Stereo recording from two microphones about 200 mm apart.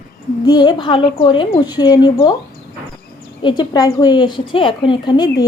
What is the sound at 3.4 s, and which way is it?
A woman's voice, 20° left (ahead or behind).